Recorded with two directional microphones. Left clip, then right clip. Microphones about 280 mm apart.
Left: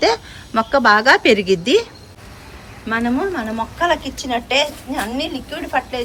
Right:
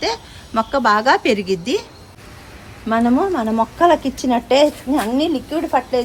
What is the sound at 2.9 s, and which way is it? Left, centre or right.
A woman's voice, centre.